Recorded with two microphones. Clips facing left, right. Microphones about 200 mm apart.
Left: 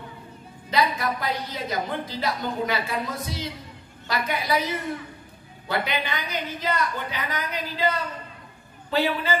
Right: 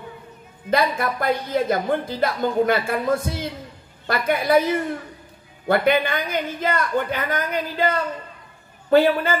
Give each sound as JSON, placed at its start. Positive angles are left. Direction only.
{"t": 0.7, "sound": "a woman's voice", "side_deg": -50}